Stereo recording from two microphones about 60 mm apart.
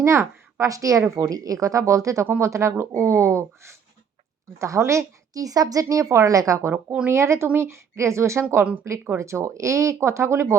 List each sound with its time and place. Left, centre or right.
0.0 s a child's voice: right
0.6 s a woman's voice: right
7.1 s speech: right